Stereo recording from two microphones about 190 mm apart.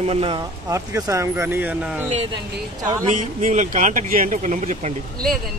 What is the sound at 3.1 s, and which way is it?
Speech, 40° right (ahead or behind).